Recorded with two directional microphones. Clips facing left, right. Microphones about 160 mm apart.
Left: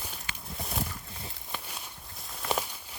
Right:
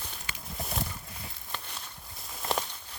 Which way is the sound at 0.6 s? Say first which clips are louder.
Right 1 dB; centre (ahead or behind).